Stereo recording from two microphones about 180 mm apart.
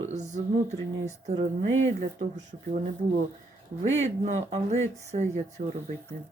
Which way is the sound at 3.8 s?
40° right (ahead or behind).